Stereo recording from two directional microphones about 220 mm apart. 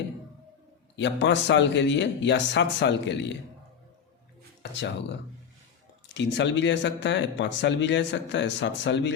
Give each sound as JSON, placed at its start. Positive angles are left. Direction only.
{"t": 0.9, "sound": "speech", "side_deg": 55}
{"t": 6.1, "sound": "speech", "side_deg": 55}